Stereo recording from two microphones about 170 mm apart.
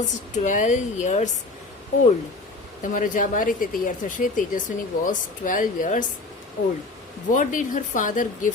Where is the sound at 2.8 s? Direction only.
50° left (ahead or behind).